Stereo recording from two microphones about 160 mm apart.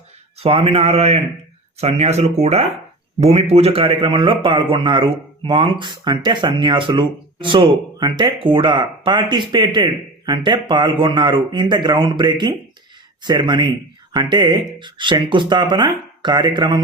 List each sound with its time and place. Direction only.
0.3 s a man's voice: 35° right (ahead or behind)